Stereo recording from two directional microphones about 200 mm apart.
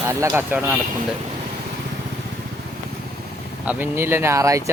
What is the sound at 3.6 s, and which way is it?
Speech, 10° right (ahead or behind).